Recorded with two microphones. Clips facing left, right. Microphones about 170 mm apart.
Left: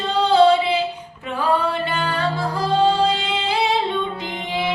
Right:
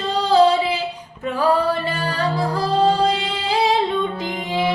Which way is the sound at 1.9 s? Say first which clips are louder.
Even; 35° right (ahead or behind).